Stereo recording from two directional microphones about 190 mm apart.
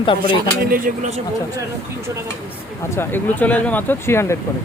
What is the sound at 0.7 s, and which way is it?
Speech, 40° right (ahead or behind).